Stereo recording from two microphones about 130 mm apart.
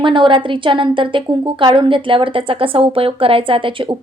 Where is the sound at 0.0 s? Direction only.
40° right (ahead or behind).